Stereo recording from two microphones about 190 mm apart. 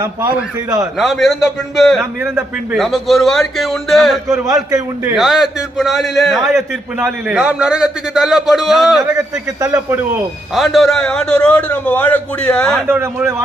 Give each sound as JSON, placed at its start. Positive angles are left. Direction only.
{"t": 0.0, "sound": "a man's voice", "side_deg": -20}
{"t": 0.8, "sound": "a man's voice", "side_deg": 0}
{"t": 4.4, "sound": "a man's voice", "side_deg": -20}
{"t": 5.1, "sound": "a man's voice", "side_deg": 0}
{"t": 9.1, "sound": "a man's voice", "side_deg": -15}
{"t": 10.5, "sound": "a man's voice", "side_deg": 0}
{"t": 12.9, "sound": "a man's voice", "side_deg": -10}